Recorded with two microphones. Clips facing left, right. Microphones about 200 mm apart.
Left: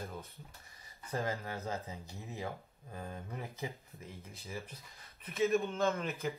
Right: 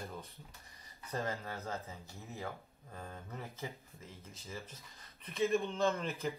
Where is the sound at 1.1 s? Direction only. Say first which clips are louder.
Left 2 dB; 15° left (ahead or behind).